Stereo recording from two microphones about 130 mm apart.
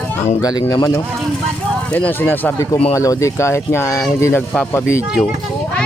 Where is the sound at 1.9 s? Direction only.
10° left (ahead or behind).